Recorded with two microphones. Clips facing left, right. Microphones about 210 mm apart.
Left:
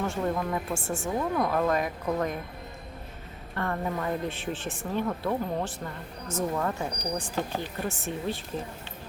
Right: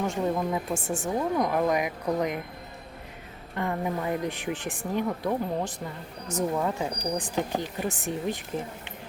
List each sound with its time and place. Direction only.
0.0 s speech: 15° right (ahead or behind)
3.5 s speech: 15° right (ahead or behind)